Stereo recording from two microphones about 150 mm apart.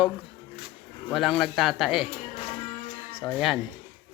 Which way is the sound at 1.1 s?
Centre (ahead or behind).